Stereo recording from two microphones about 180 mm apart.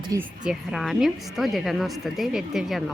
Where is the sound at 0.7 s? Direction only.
Centre (ahead or behind).